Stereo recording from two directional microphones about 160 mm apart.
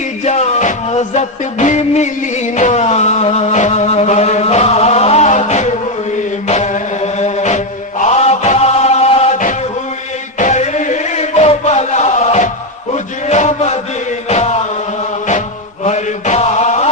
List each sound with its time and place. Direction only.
0.3 s music: 45° left (ahead or behind)
2.6 s a sound: 45° left (ahead or behind)
6.5 s music: 45° left (ahead or behind)
10.3 s music: 50° left (ahead or behind)
12.9 s a sound: 45° left (ahead or behind)
14.3 s chant: 40° left (ahead or behind)
15.8 s mantra: 45° left (ahead or behind)